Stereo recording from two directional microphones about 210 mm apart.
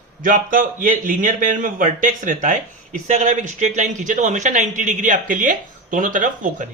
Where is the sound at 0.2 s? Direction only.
40° right (ahead or behind).